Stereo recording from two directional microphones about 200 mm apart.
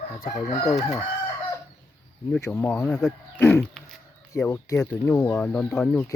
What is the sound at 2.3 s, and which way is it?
Speech, 10° left (ahead or behind).